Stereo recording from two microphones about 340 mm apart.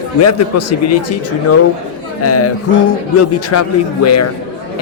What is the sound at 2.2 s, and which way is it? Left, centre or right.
Speech, left.